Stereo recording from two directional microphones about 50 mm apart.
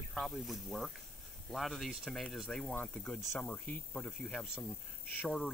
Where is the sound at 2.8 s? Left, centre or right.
Left.